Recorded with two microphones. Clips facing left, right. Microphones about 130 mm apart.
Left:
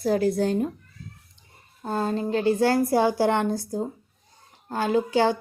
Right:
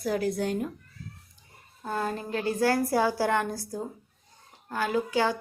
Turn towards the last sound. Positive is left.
turn(degrees=30)  # may be behind; listen again after turning